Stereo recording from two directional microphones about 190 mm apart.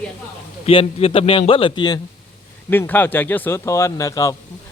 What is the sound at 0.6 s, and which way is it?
Speech, 30° left (ahead or behind).